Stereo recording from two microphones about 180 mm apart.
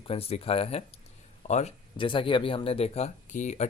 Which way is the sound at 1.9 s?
30° left (ahead or behind).